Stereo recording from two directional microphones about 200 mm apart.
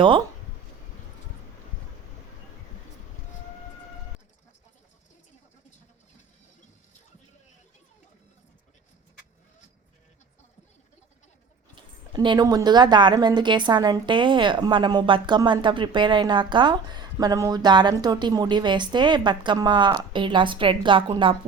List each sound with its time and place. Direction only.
11.7 s speech: 25° right (ahead or behind)